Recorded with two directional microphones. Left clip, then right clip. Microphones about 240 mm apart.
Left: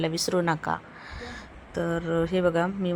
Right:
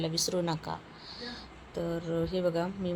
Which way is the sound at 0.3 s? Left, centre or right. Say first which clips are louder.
Left 7 dB; centre.